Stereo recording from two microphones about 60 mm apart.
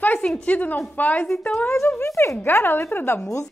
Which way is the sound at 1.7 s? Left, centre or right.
Left.